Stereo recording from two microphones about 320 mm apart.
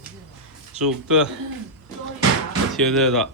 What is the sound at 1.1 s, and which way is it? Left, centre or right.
Speech, centre.